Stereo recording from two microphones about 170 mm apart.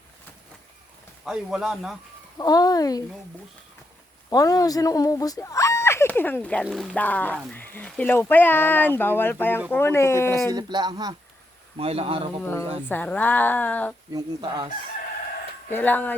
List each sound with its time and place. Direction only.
1.2 s speech: 5° right (ahead or behind)
2.4 s speech: 20° left (ahead or behind)
4.3 s speech: 20° left (ahead or behind)
10.5 s speech: 25° right (ahead or behind)
11.8 s speech: 35° right (ahead or behind)
12.4 s speech: 10° left (ahead or behind)
14.1 s speech: 25° right (ahead or behind)
15.7 s speech: 10° left (ahead or behind)